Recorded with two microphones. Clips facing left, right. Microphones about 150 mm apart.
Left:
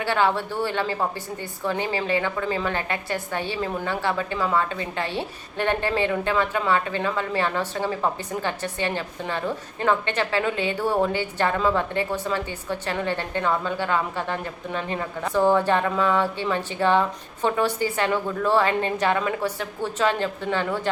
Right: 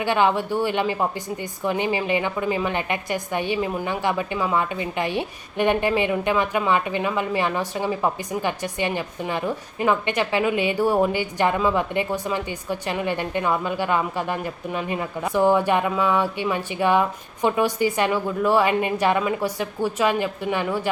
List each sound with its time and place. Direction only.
0.0 s a woman's voice: 15° right (ahead or behind)